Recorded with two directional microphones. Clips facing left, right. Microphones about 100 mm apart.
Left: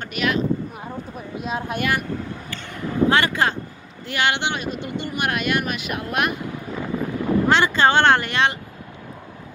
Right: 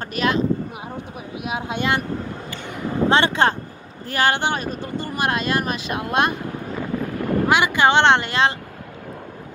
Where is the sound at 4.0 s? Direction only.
40° right (ahead or behind).